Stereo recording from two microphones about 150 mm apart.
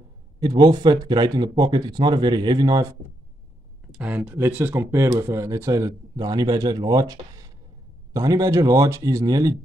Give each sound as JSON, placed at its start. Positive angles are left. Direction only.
{"t": 0.4, "sound": "speech", "side_deg": -25}
{"t": 3.9, "sound": "speech", "side_deg": -10}